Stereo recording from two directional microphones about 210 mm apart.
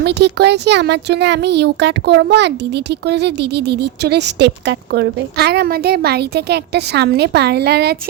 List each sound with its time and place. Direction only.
0.0 s speech: 55° right (ahead or behind)